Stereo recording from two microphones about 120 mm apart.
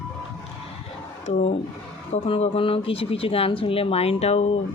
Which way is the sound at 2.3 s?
50° left (ahead or behind).